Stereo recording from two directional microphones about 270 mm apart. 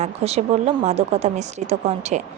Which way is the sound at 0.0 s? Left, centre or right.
Right.